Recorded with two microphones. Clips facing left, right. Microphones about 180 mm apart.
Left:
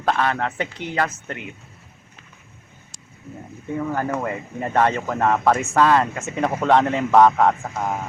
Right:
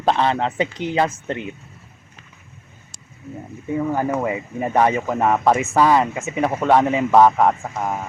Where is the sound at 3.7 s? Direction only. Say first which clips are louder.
Right 3 dB; 10° right (ahead or behind).